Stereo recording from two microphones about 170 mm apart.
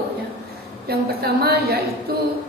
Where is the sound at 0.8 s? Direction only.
70° right (ahead or behind).